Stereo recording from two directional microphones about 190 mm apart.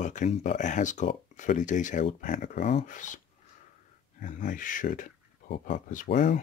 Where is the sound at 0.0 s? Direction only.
40° left (ahead or behind).